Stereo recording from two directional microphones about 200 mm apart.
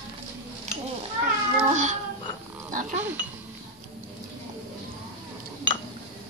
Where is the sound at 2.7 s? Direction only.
40° right (ahead or behind).